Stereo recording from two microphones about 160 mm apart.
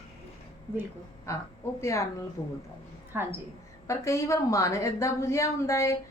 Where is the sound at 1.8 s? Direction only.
15° left (ahead or behind).